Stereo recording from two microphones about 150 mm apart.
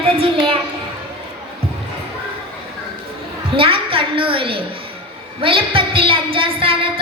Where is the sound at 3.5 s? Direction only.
35° right (ahead or behind).